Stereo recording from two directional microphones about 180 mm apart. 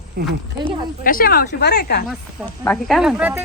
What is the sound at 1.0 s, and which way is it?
A woman's voice, 55° left (ahead or behind).